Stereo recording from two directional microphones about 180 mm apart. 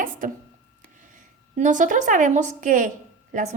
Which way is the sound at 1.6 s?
45° right (ahead or behind).